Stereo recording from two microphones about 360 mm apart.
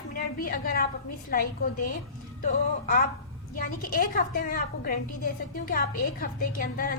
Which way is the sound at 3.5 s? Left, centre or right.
Left.